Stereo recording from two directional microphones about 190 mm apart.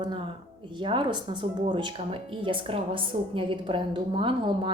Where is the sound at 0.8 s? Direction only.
25° right (ahead or behind).